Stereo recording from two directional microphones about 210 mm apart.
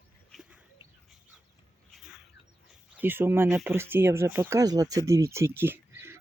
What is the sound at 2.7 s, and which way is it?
Speech, 5° right (ahead or behind).